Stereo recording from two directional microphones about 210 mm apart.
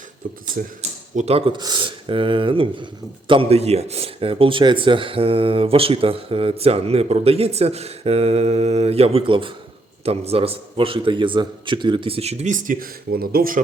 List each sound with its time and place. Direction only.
0.5 s speech: 35° right (ahead or behind)